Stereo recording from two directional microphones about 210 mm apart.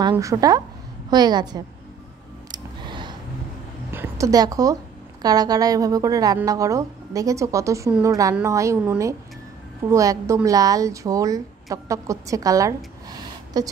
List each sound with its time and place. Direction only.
0.1 s a woman's voice: 15° right (ahead or behind)
2.5 s a sound: 20° right (ahead or behind)
3.9 s a woman's voice: 10° right (ahead or behind)